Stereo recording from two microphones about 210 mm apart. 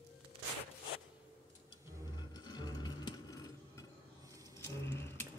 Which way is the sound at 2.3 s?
20° left (ahead or behind).